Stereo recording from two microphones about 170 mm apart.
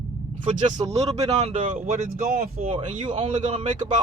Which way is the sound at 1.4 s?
40° right (ahead or behind).